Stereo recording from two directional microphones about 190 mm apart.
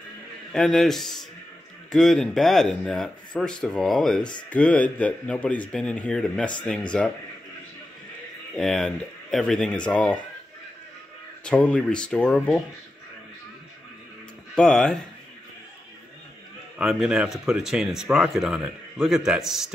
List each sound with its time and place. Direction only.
0.5 s speech: 5° left (ahead or behind)
8.5 s speech: centre (ahead or behind)
11.4 s speech: 5° left (ahead or behind)
14.5 s speech: 5° left (ahead or behind)
16.7 s speech: 5° right (ahead or behind)